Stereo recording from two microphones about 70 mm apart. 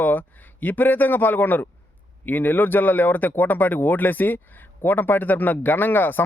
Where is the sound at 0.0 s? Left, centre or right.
Left.